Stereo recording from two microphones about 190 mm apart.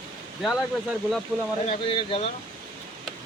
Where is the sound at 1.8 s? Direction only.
30° left (ahead or behind).